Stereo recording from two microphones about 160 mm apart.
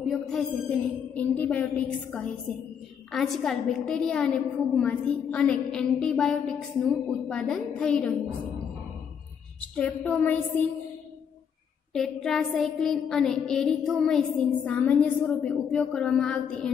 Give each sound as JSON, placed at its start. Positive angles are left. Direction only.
{"t": 0.0, "sound": "a woman's voice", "side_deg": 0}
{"t": 9.8, "sound": "a woman's voice", "side_deg": 10}
{"t": 11.9, "sound": "a woman's voice", "side_deg": 0}